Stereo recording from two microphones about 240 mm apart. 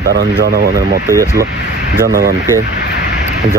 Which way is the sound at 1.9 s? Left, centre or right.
Right.